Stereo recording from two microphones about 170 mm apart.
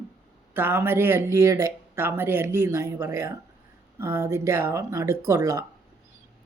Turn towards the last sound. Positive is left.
turn(degrees=-20)  # may be behind; listen again after turning